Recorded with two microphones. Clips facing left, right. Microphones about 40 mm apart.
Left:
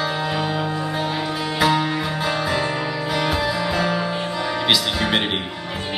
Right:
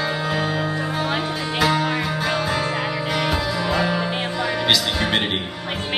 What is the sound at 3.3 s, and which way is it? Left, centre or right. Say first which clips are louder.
Music: even; centre.